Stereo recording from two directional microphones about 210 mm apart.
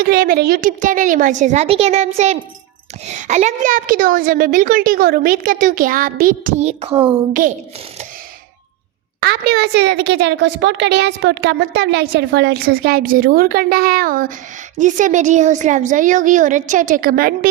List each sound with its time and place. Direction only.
0.1 s a woman's voice: 45° right (ahead or behind); by 7.1 s 25° right (ahead or behind)
9.2 s a woman's voice: 50° right (ahead or behind)